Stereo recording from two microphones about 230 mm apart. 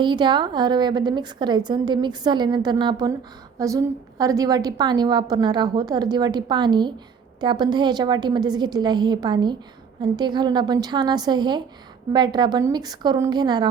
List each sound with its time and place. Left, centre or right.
0.0 s a woman's voice: centre